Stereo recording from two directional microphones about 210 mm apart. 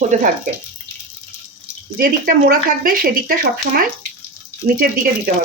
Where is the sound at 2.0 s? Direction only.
40° right (ahead or behind).